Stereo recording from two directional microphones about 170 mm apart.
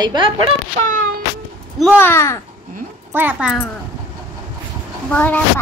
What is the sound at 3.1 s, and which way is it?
Speech, 10° right (ahead or behind).